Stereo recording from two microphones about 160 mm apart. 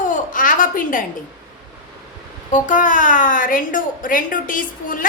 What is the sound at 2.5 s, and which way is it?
A woman's voice, 55° left (ahead or behind).